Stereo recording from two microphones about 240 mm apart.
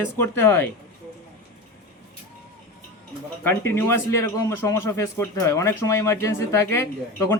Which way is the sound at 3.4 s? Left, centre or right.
Centre.